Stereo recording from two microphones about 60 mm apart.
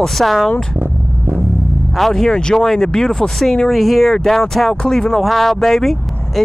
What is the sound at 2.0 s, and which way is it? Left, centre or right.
Speech, centre.